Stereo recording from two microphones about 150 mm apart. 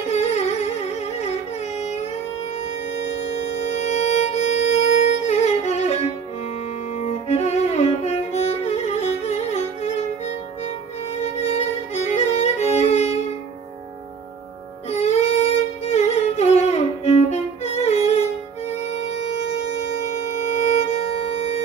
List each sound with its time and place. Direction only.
0.1 s music: 45° left (ahead or behind)
3.0 s music: 50° left (ahead or behind)
7.2 s music: 45° left (ahead or behind)
11.4 s violin: 45° left (ahead or behind)
14.9 s music: 45° left (ahead or behind)
19.1 s shofar: 45° left (ahead or behind)
20.7 s music: 45° left (ahead or behind)